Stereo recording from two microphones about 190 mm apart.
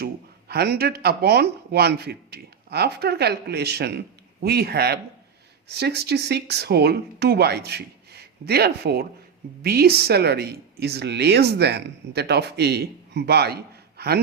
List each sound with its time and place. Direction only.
0.0 s speech: 55° right (ahead or behind)